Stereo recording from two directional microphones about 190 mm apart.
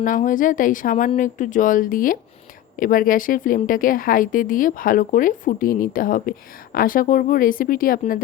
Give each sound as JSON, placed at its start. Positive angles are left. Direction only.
{"t": 0.0, "sound": "a woman's voice", "side_deg": 45}